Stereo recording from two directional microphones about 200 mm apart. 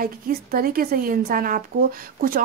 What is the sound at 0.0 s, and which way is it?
A woman's voice, 45° right (ahead or behind).